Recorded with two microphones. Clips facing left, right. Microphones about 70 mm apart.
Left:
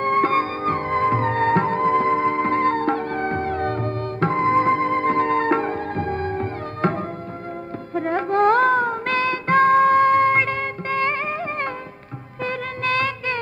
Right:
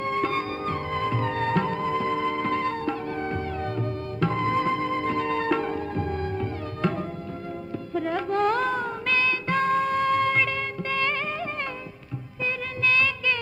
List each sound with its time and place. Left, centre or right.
0.0 s music: left
12.4 s music: left